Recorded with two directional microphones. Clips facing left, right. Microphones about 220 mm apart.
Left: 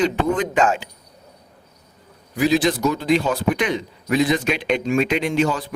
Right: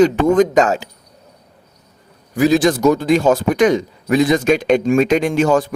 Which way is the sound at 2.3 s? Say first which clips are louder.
Right 5 dB; 45° right (ahead or behind).